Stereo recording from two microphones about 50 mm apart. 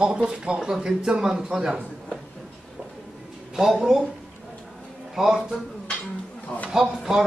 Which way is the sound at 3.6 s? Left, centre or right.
Centre.